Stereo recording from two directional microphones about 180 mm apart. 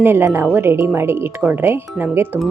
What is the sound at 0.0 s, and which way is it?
Speech, 10° right (ahead or behind).